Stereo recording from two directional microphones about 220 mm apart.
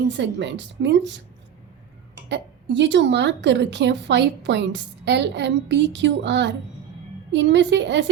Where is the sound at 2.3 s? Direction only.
55° right (ahead or behind).